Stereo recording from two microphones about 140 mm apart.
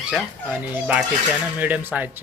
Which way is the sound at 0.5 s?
10° right (ahead or behind).